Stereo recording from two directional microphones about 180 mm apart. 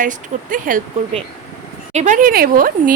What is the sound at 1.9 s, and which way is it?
Speech, 45° right (ahead or behind).